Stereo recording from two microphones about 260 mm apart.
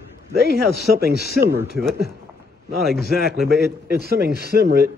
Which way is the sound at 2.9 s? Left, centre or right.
Left.